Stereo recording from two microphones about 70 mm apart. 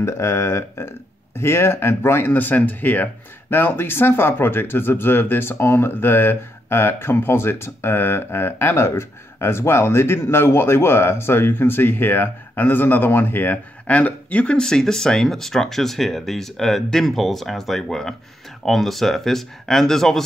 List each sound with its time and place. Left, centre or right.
0.0 s speech: left; by 20.2 s centre